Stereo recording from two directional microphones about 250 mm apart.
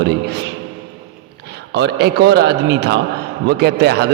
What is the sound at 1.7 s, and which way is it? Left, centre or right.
A man's voice, right.